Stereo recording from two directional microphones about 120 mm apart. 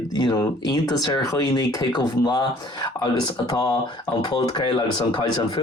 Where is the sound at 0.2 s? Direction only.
30° left (ahead or behind).